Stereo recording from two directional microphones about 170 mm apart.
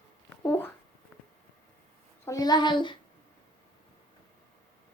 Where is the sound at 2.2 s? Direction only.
20° left (ahead or behind).